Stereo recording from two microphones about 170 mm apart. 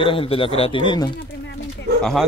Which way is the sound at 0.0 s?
30° left (ahead or behind).